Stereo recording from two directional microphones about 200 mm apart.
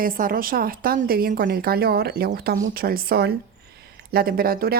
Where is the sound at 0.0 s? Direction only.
45° right (ahead or behind).